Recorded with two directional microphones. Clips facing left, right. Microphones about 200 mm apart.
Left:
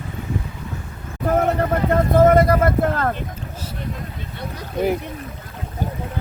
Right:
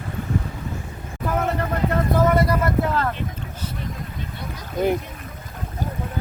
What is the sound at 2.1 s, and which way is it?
Speech, 50° left (ahead or behind).